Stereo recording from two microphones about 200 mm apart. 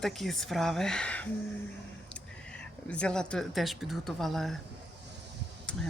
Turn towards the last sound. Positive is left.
turn(degrees=5)  # may be behind; listen again after turning